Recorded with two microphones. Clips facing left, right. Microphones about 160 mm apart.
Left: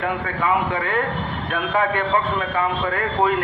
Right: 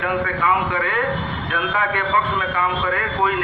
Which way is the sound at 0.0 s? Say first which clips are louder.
Right 2 dB; 35° left (ahead or behind).